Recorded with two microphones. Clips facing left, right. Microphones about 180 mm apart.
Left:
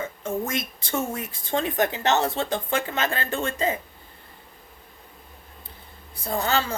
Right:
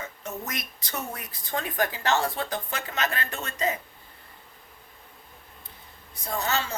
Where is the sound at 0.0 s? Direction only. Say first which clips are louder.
Left 8 dB; 30° left (ahead or behind).